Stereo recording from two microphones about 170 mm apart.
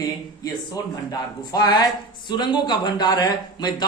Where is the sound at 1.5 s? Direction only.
25° left (ahead or behind).